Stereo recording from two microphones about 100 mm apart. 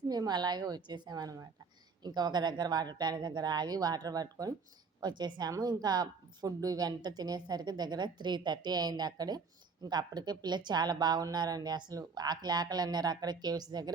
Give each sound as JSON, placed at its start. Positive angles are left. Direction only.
{"t": 0.1, "sound": "a woman's voice", "side_deg": -45}